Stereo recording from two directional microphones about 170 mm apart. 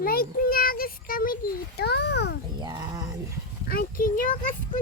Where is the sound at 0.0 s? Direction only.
60° left (ahead or behind); by 2.4 s 80° left.